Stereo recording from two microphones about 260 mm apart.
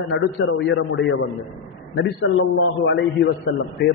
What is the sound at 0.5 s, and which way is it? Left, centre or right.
A man's voice, left.